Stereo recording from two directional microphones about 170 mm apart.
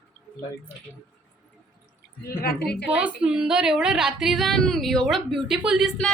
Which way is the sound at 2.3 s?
65° left (ahead or behind).